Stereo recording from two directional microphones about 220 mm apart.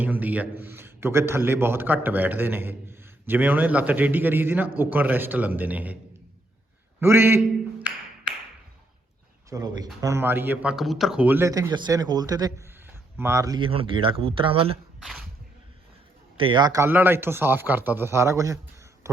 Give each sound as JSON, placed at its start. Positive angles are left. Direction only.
{"t": 0.0, "sound": "a man's voice", "side_deg": -5}
{"t": 7.0, "sound": "a sound", "side_deg": -10}
{"t": 9.5, "sound": "a man's voice", "side_deg": -15}
{"t": 16.4, "sound": "a man's voice", "side_deg": -20}